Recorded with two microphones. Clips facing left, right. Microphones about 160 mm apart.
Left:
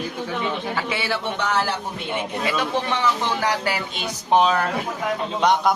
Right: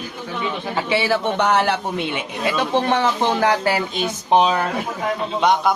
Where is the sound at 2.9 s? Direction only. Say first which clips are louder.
Right 4 dB; 50° right (ahead or behind).